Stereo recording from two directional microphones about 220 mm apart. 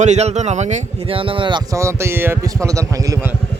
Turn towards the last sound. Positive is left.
turn(degrees=-15)  # may be behind; listen again after turning